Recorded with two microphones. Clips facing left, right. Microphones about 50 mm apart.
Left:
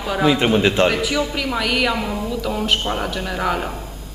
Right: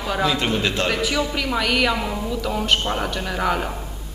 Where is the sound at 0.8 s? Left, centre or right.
Centre.